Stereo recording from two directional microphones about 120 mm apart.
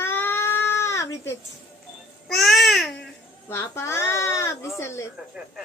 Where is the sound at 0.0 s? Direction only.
20° left (ahead or behind).